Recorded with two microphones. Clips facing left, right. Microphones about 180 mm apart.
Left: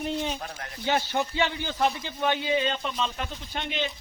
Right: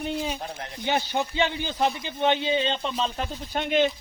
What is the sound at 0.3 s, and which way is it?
Speech, 25° right (ahead or behind).